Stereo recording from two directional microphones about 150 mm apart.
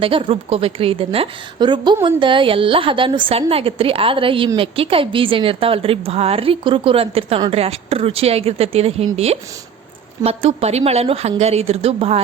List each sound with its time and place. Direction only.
0.0 s a woman's voice: 35° right (ahead or behind)